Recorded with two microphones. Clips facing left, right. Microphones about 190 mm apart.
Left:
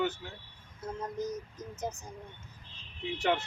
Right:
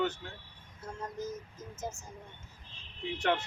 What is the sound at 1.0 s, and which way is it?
Speech, 20° left (ahead or behind).